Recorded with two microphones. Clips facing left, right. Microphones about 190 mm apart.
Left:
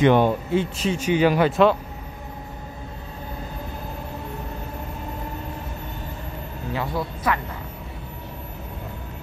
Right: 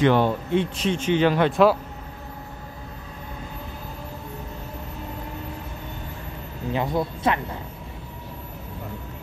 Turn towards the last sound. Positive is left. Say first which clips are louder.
# right 2 dB
turn(degrees=-20)  # may be behind; listen again after turning